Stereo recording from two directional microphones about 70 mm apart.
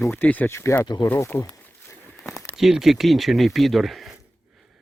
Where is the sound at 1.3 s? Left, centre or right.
Left.